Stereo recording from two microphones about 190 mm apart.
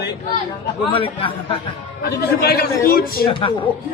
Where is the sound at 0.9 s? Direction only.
30° left (ahead or behind).